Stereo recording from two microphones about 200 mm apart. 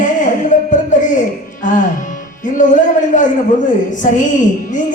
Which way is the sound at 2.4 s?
40° left (ahead or behind).